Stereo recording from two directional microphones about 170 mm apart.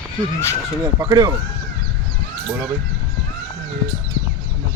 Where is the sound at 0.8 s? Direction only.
20° right (ahead or behind).